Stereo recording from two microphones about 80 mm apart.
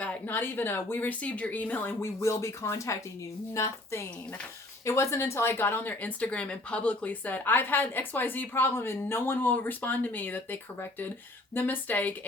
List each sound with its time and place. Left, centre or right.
0.0 s speech: left
2.0 s speech: left